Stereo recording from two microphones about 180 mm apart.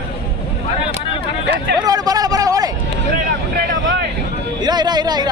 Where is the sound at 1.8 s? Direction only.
20° right (ahead or behind).